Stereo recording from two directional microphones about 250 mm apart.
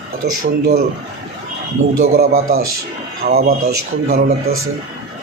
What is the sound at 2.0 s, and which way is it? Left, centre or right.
A man's voice, right.